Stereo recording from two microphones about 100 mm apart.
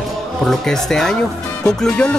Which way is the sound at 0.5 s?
5° left (ahead or behind).